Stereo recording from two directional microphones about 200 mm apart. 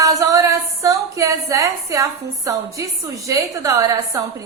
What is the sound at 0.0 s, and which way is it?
A woman's voice, 15° right (ahead or behind).